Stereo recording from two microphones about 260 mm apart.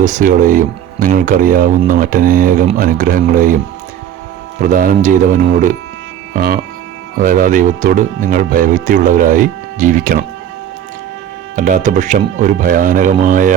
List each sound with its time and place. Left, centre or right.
0.0 s speech: right
4.6 s speech: right
6.3 s music: right
7.2 s speech: right
11.5 s speech: right